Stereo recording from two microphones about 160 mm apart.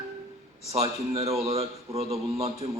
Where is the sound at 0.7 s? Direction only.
40° right (ahead or behind).